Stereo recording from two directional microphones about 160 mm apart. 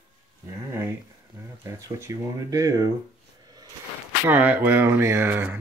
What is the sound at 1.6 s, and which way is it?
Speech, 20° right (ahead or behind).